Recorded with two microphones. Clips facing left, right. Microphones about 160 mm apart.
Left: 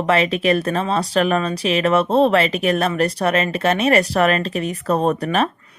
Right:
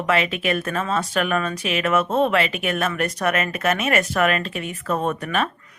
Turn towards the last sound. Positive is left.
turn(degrees=35)  # may be behind; listen again after turning